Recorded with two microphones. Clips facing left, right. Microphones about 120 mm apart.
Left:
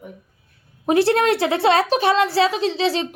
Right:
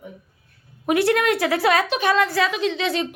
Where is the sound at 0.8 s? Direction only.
30° left (ahead or behind).